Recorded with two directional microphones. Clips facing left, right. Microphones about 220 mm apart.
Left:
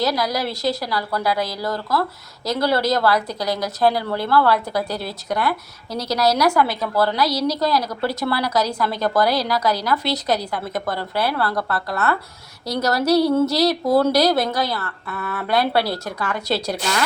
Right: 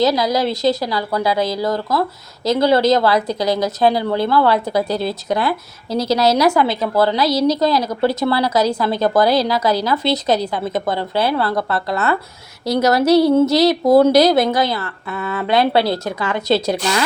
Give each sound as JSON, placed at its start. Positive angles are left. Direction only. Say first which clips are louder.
{"t": 0.0, "sound": "a woman's voice", "louder": "right 6 dB", "side_deg": -20}